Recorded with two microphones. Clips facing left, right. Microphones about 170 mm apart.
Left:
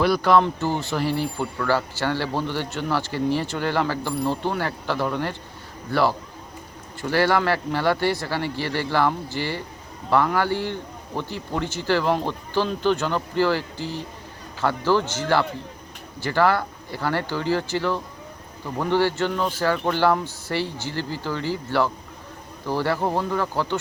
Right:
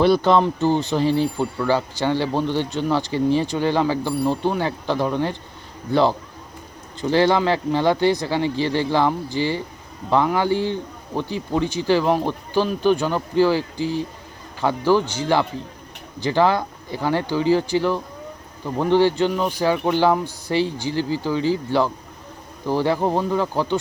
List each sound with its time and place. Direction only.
0.0 s a man's voice: 25° right (ahead or behind)